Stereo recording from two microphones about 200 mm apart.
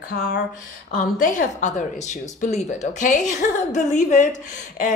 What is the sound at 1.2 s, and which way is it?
A woman's voice, 40° left (ahead or behind).